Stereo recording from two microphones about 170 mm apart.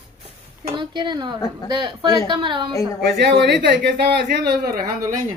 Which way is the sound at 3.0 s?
80° right.